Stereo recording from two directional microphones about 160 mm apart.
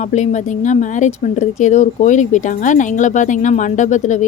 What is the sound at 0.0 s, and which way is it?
Speech, 50° left (ahead or behind).